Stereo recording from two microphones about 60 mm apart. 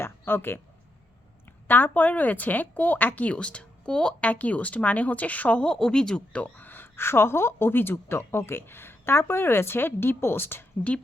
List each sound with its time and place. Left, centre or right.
0.0 s a sound: left
1.6 s speech: left
5.6 s a woman's voice: centre; by 10.7 s left